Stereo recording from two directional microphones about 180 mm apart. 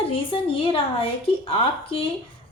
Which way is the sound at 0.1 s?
30° left (ahead or behind).